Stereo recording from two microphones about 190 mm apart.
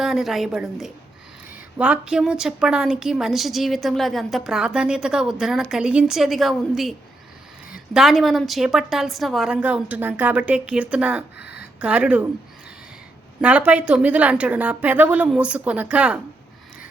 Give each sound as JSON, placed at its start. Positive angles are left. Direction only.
{"t": 0.0, "sound": "a woman's voice", "side_deg": 0}
{"t": 7.9, "sound": "a woman's voice", "side_deg": 0}
{"t": 11.3, "sound": "speech", "side_deg": 60}
{"t": 11.8, "sound": "a woman's voice", "side_deg": -5}
{"t": 13.4, "sound": "a woman's voice", "side_deg": -5}